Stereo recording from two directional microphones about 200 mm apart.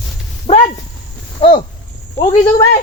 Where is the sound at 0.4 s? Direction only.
30° left (ahead or behind).